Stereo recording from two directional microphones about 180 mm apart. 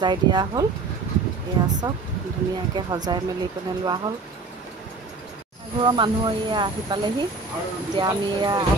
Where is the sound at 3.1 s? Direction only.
25° right (ahead or behind).